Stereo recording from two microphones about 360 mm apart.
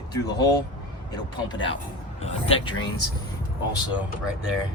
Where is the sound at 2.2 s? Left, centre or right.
Centre.